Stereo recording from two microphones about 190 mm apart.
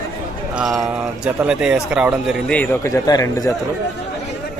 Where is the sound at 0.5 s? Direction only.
Centre (ahead or behind).